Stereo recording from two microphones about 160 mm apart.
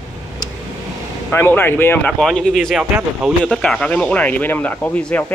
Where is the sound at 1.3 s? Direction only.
15° left (ahead or behind).